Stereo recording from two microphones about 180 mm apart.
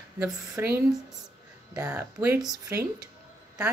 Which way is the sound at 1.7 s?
10° right (ahead or behind).